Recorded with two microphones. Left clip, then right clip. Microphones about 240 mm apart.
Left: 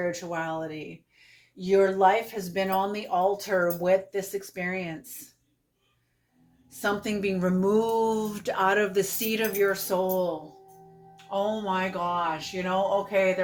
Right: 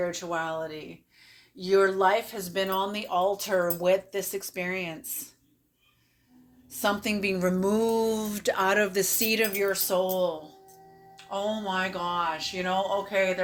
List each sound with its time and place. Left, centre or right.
0.0 s speech: right
6.8 s speech: right